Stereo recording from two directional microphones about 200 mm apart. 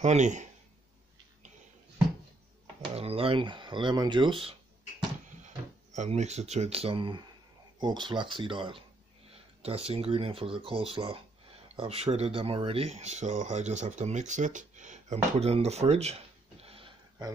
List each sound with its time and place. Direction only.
0.0 s speech: 35° right (ahead or behind)
2.9 s speech: 30° right (ahead or behind)
5.9 s speech: 35° right (ahead or behind)